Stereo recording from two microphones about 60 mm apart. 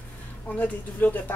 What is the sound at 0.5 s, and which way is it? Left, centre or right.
Speech, left.